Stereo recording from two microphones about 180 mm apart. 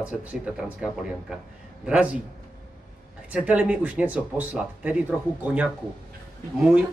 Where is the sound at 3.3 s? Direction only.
5° right (ahead or behind).